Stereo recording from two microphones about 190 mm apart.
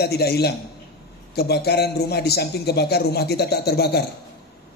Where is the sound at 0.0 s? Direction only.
55° left (ahead or behind).